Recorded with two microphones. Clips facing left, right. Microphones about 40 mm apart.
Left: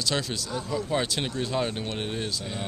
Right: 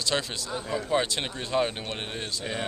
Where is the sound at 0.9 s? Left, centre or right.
Centre.